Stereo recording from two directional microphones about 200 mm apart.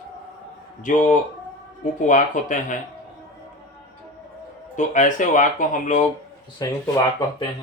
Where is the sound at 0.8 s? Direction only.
40° left (ahead or behind).